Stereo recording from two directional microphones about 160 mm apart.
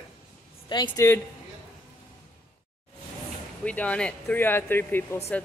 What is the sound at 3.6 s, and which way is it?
Speech, 10° left (ahead or behind).